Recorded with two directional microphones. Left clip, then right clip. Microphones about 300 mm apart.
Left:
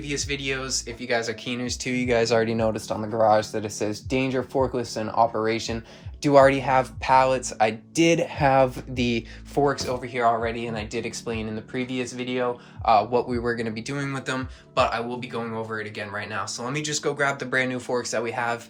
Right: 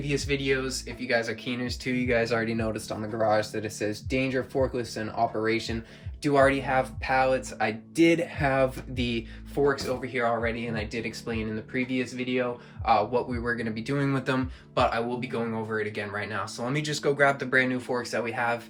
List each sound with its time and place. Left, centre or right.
0.0 s speech: centre